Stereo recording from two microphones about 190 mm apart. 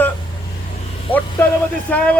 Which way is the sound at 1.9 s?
5° left (ahead or behind).